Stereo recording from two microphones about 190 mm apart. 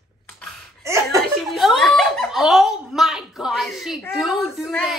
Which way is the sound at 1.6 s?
Centre (ahead or behind).